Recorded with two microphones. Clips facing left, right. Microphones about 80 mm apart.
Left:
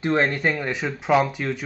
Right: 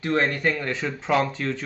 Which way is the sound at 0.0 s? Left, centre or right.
Left.